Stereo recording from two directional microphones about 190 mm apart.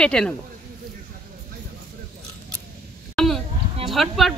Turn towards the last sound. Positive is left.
turn(degrees=0)  # may be behind; listen again after turning